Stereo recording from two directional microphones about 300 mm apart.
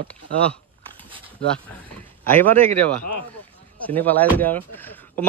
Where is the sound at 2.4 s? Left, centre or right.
Centre.